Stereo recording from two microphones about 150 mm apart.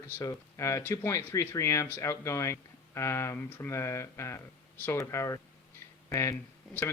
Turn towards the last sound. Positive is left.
turn(degrees=15)  # may be behind; listen again after turning